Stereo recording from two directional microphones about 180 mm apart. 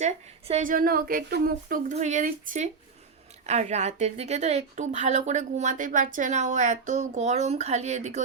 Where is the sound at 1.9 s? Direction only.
40° right (ahead or behind).